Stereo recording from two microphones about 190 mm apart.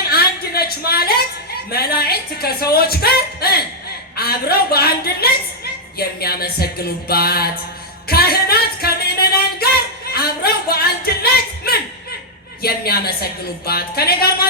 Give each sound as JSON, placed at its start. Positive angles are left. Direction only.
{"t": 0.1, "sound": "a sound", "side_deg": 55}
{"t": 1.7, "sound": "a woman's voice", "side_deg": 55}
{"t": 8.0, "sound": "music", "side_deg": 55}
{"t": 12.6, "sound": "speech", "side_deg": 55}